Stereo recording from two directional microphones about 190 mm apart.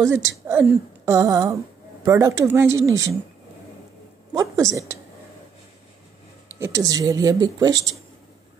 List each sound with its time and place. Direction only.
0.0 s speech: 15° right (ahead or behind)
4.3 s speech: 15° right (ahead or behind)
6.6 s a woman's voice: 15° right (ahead or behind)